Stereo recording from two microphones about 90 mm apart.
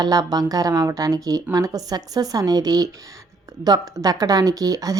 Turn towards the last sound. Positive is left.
turn(degrees=-40)  # may be behind; listen again after turning